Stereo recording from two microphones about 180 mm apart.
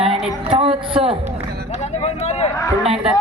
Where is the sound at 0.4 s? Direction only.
30° right (ahead or behind).